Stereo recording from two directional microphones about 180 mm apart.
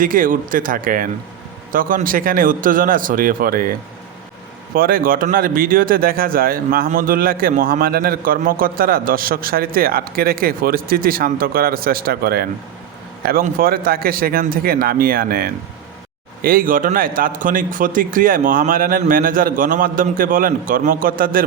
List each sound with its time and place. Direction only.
0.0 s speech: 50° right (ahead or behind)
4.7 s speech: 55° right (ahead or behind)